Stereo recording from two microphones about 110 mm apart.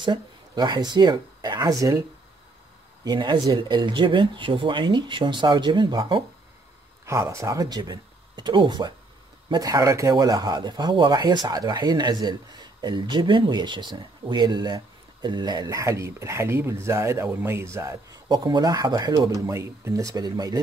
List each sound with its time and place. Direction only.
0.0 s speech: 40° right (ahead or behind)
7.1 s speech: 25° right (ahead or behind); by 8.9 s 45° right (ahead or behind)
9.5 s speech: 35° right (ahead or behind)
18.3 s speech: 40° right (ahead or behind)
19.4 s speech: 25° right (ahead or behind)